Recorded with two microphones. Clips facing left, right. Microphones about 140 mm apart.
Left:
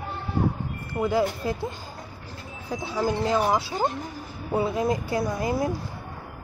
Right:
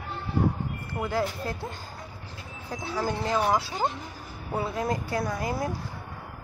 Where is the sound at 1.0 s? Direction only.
10° left (ahead or behind).